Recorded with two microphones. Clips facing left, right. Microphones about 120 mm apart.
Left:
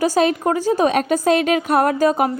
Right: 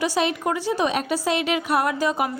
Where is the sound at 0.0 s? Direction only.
45° left (ahead or behind).